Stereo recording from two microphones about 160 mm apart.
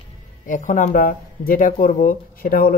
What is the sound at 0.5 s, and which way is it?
Speech, 50° left (ahead or behind).